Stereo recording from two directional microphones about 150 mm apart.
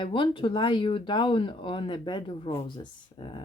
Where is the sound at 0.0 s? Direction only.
35° left (ahead or behind).